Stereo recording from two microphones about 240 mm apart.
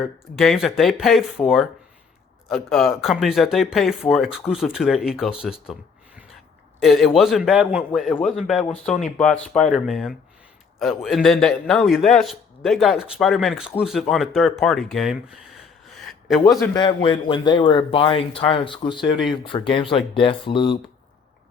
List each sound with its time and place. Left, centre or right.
0.3 s a man's voice: centre
6.7 s a man's voice: centre
15.9 s a sound: centre
16.4 s speech: centre